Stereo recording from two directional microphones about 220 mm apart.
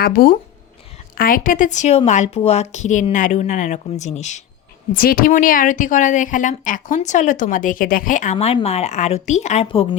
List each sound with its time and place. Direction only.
0.0 s a woman's voice: 40° left (ahead or behind)